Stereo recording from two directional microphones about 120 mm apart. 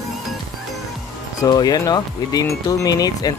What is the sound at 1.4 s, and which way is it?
Speech, 35° left (ahead or behind).